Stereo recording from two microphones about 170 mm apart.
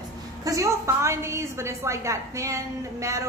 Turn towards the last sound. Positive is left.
turn(degrees=-15)  # may be behind; listen again after turning